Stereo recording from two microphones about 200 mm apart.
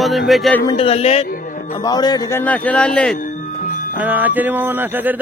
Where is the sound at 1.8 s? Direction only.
20° left (ahead or behind).